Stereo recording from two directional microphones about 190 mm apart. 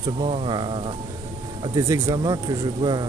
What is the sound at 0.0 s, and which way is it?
Speech, 30° right (ahead or behind).